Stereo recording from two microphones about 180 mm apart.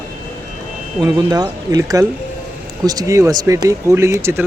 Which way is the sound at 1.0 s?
25° right (ahead or behind).